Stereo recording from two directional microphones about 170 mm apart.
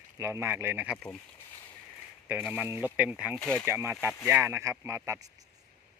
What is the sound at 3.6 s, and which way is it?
Speech, 15° right (ahead or behind).